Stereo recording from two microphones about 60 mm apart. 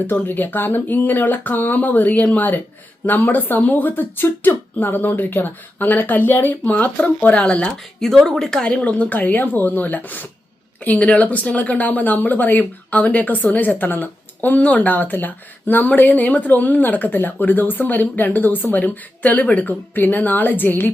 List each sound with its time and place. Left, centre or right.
0.1 s speech: left
8.0 s speech: centre; by 20.9 s left